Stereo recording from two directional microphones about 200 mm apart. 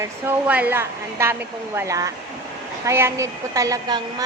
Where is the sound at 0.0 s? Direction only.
10° right (ahead or behind).